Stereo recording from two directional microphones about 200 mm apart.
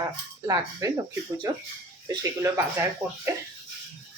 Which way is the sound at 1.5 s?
20° right (ahead or behind).